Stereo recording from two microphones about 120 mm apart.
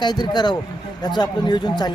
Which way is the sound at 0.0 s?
35° left (ahead or behind).